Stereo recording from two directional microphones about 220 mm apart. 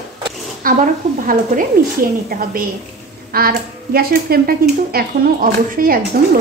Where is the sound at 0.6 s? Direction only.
40° right (ahead or behind).